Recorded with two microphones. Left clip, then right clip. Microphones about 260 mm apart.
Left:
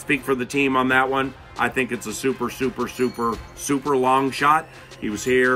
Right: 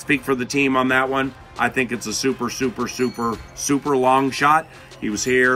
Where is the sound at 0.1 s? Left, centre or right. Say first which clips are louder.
Right 2 dB; centre.